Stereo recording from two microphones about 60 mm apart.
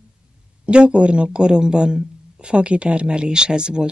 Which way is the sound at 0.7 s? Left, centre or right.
Centre.